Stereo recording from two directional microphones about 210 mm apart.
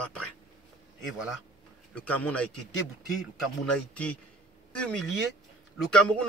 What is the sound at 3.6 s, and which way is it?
Speech, 5° left (ahead or behind).